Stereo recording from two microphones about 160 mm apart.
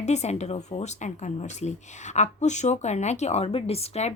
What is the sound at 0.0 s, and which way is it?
Speech, 45° left (ahead or behind).